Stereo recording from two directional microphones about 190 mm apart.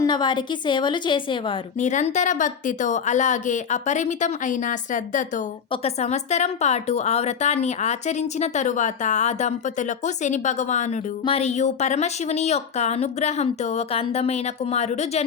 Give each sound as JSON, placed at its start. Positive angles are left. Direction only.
{"t": 0.0, "sound": "a woman's voice", "side_deg": 25}
{"t": 1.8, "sound": "a woman's voice", "side_deg": 40}